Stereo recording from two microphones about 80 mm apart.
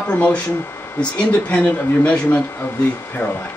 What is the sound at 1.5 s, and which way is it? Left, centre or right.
Speech, centre.